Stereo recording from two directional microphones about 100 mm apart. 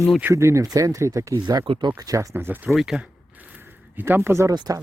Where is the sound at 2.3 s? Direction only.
20° right (ahead or behind).